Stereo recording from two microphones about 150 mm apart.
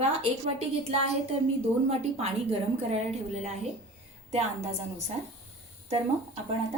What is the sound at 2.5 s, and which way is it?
A woman's voice, 45° right (ahead or behind).